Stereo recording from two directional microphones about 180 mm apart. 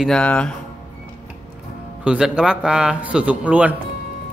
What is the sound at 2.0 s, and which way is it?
Speech, 5° right (ahead or behind).